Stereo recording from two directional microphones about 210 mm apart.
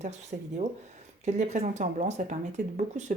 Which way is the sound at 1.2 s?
35° right (ahead or behind).